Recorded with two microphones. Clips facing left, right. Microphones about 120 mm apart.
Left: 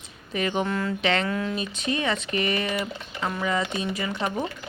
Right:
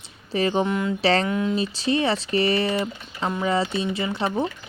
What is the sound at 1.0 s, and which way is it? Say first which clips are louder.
Speech: right 5 dB; 35° right (ahead or behind).